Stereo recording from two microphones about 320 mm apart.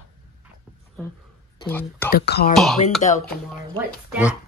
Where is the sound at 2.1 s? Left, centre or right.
Left.